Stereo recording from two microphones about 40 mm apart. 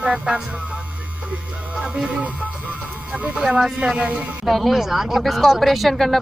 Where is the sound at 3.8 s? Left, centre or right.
Right.